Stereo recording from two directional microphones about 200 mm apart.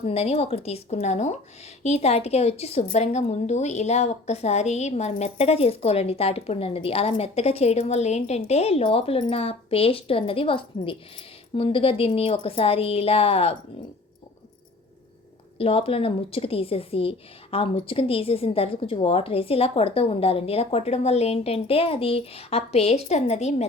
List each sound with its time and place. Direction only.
0.0 s a woman's voice: 30° left (ahead or behind)
15.5 s a woman's voice: 30° left (ahead or behind)